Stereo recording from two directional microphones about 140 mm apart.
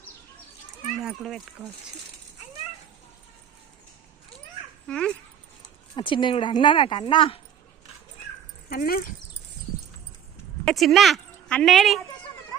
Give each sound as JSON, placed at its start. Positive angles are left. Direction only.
{"t": 1.0, "sound": "speech", "side_deg": -5}
{"t": 4.9, "sound": "speech", "side_deg": 5}
{"t": 6.0, "sound": "speech", "side_deg": 35}
{"t": 8.7, "sound": "speech", "side_deg": 90}
{"t": 10.7, "sound": "a woman's voice", "side_deg": 0}